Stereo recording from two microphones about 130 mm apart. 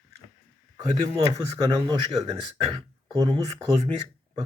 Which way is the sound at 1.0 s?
45° right (ahead or behind).